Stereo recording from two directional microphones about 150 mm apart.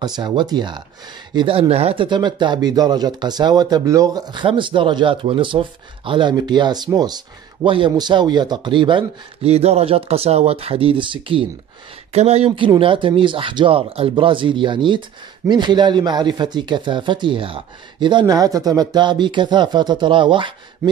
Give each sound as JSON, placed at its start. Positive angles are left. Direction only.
{"t": 0.0, "sound": "speech", "side_deg": -30}